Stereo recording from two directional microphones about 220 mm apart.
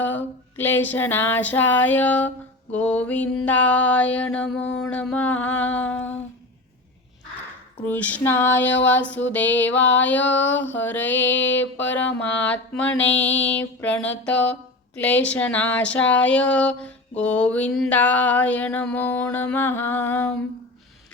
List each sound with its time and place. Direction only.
0.5 s speech: 10° left (ahead or behind)
2.7 s a sound: 5° left (ahead or behind)
4.8 s speech: 5° left (ahead or behind)
7.9 s speech: 5° left (ahead or behind)
13.0 s mantra: 55° left (ahead or behind)
13.6 s speech: 5° left (ahead or behind)